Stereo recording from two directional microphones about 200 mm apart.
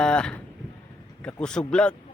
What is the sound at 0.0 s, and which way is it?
Speech, 5° left (ahead or behind).